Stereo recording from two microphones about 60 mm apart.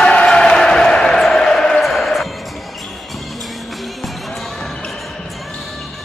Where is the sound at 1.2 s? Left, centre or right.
Centre.